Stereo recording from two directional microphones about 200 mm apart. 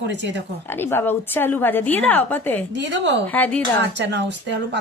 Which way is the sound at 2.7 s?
65° right (ahead or behind).